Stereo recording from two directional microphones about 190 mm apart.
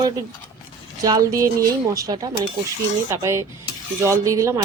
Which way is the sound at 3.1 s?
15° right (ahead or behind).